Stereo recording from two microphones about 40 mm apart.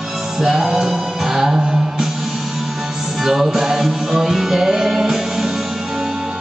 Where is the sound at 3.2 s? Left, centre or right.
Centre.